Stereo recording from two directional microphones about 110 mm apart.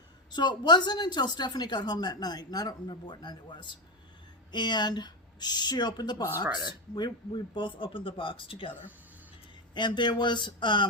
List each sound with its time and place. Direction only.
0.3 s speech: 40° left (ahead or behind)
9.7 s speech: 45° left (ahead or behind)